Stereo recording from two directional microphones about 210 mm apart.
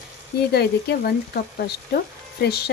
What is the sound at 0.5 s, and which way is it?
Speech, 50° left (ahead or behind).